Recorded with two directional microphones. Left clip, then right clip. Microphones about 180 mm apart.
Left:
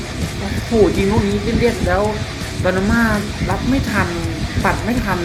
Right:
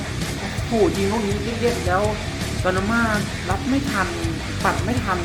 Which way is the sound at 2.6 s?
15° left (ahead or behind).